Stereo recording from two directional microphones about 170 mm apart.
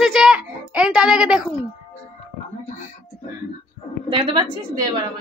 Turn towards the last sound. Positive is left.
turn(degrees=-25)  # may be behind; listen again after turning